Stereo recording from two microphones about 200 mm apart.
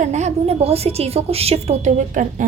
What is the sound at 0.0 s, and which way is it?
A woman's voice, 35° right (ahead or behind).